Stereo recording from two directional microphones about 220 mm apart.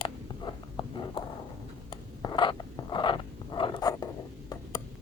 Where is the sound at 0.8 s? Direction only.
25° left (ahead or behind).